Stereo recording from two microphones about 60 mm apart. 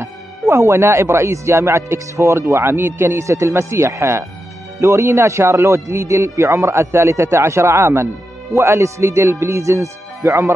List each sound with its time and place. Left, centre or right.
0.0 s speech: right